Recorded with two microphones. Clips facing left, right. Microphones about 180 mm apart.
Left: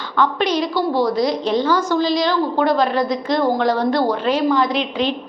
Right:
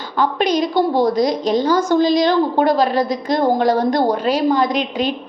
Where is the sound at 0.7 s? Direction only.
20° right (ahead or behind).